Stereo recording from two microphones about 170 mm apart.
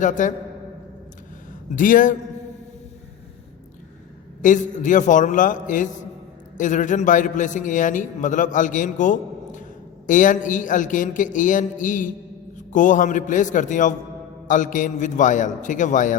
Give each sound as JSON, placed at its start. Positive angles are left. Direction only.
{"t": 0.0, "sound": "a man's voice", "side_deg": 45}
{"t": 1.7, "sound": "a man's voice", "side_deg": 50}
{"t": 4.4, "sound": "a man's voice", "side_deg": 50}